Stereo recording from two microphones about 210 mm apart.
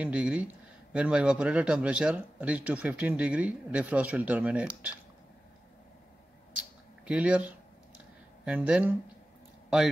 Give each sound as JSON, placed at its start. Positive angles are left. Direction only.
{"t": 0.0, "sound": "speech", "side_deg": -5}
{"t": 7.1, "sound": "speech", "side_deg": -5}